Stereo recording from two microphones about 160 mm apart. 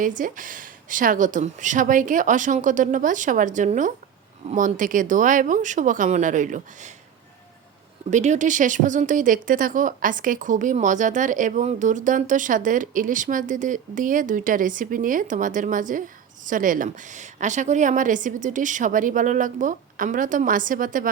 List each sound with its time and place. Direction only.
0.0 s a woman's voice: 55° right (ahead or behind)
8.1 s a woman's voice: 45° right (ahead or behind)